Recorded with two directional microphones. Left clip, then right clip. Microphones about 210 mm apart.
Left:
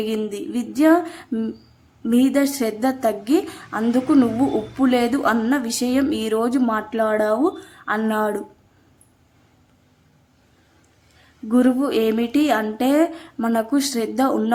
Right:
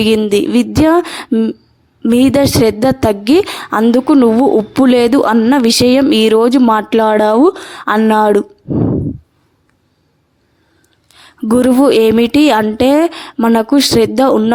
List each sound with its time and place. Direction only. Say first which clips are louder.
0.2 s a woman's voice: right 14 dB; 40° right (ahead or behind)
11.4 s a woman's voice: right 10 dB; 45° right (ahead or behind)